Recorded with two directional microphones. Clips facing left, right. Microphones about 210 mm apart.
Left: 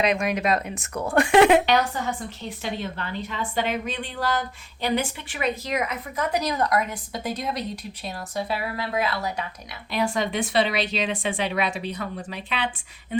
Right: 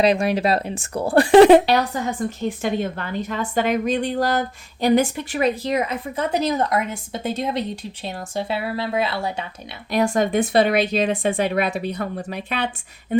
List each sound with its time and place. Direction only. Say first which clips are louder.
0.0 s speech: right 5 dB; 35° right (ahead or behind)
2.4 s a woman's voice: right 8 dB; 50° right (ahead or behind); by 9.4 s 25° right (ahead or behind)
9.9 s a woman's voice: right 6 dB; 45° right (ahead or behind)